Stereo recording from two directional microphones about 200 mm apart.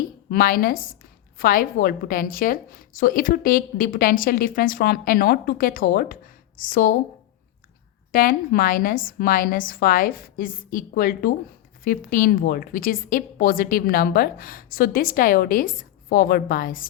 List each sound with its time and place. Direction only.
0.3 s a woman's voice: 45° left (ahead or behind)
8.1 s a woman's voice: 45° left (ahead or behind)